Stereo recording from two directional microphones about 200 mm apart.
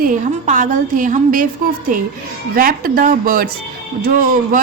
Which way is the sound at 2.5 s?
45° right (ahead or behind).